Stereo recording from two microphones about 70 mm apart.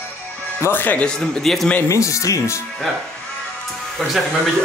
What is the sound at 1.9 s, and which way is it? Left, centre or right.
Speech, left.